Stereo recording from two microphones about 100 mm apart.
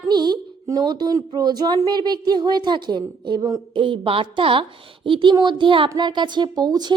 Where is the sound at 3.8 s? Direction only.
55° right (ahead or behind).